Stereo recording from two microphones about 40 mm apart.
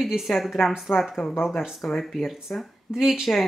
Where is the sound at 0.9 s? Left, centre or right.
Left.